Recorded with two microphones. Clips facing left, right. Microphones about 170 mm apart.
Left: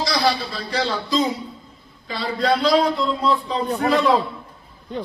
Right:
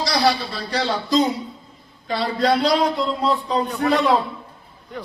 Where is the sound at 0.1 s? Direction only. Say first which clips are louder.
Right 4 dB; 35° right (ahead or behind).